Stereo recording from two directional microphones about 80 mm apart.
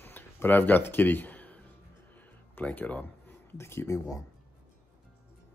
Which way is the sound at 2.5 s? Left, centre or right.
Left.